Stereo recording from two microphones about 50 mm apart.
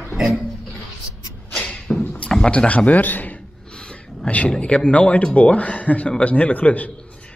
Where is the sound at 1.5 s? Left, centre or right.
Left.